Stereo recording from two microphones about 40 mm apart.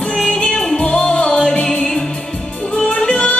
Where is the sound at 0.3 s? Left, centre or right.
Left.